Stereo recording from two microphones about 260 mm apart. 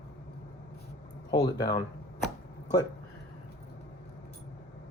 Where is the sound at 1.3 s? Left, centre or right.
Centre.